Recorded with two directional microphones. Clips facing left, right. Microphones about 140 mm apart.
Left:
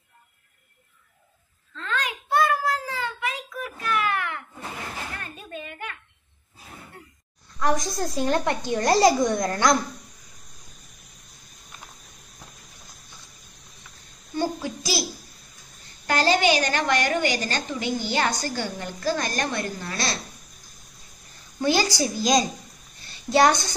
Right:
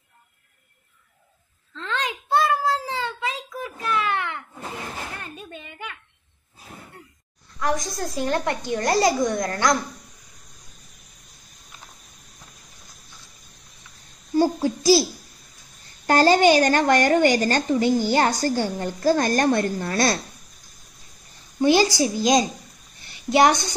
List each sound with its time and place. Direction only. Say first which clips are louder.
1.8 s child singing: right 1 dB; 25° right (ahead or behind)
5.2 s a sound: left 1 dB; 15° right (ahead or behind)
7.6 s a child's voice: left 1 dB; 25° left (ahead or behind)
14.3 s child singing: right 7 dB; 30° right (ahead or behind)
16.1 s a woman's voice: right 5 dB; 45° right (ahead or behind)
21.5 s a child's voice: right 5 dB; 25° right (ahead or behind)